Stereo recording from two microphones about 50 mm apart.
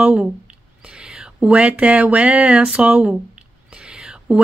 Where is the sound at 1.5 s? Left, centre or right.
Right.